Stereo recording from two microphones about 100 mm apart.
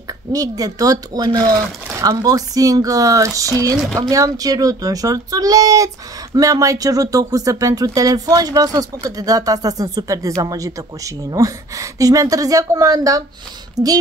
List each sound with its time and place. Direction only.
0.3 s speech: 35° right (ahead or behind)